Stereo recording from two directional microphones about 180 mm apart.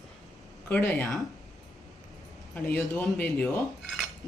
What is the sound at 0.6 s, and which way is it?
Speech, 10° left (ahead or behind).